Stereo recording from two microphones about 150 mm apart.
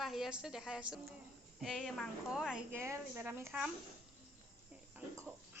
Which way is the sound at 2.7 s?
15° right (ahead or behind).